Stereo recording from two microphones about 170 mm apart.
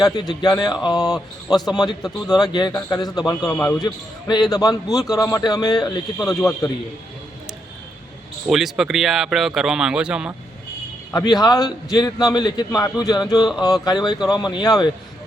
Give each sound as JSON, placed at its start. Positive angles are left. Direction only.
{"t": 0.0, "sound": "a man's voice", "side_deg": 20}
{"t": 8.4, "sound": "speech", "side_deg": 0}
{"t": 11.1, "sound": "a man's voice", "side_deg": 20}